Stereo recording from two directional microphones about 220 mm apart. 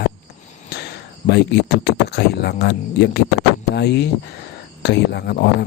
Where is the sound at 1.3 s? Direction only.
50° left (ahead or behind).